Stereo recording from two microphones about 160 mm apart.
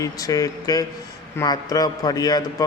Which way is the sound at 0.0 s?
20° left (ahead or behind).